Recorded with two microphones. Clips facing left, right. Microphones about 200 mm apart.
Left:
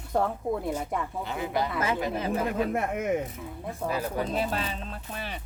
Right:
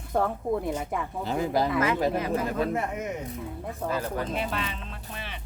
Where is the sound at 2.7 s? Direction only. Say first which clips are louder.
Left 3 dB; 55° left (ahead or behind).